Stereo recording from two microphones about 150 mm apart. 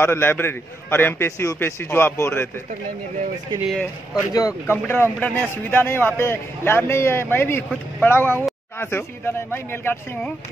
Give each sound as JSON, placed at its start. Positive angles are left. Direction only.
{"t": 0.0, "sound": "speech", "side_deg": 15}
{"t": 3.6, "sound": "speech", "side_deg": 0}
{"t": 4.3, "sound": "speech", "side_deg": 25}